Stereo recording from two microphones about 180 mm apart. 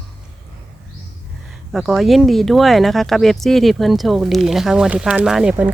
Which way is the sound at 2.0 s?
Centre (ahead or behind).